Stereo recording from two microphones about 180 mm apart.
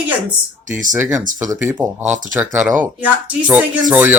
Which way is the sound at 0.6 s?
45° right (ahead or behind).